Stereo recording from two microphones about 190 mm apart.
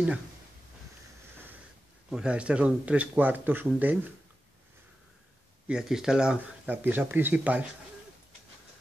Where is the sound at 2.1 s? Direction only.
5° right (ahead or behind).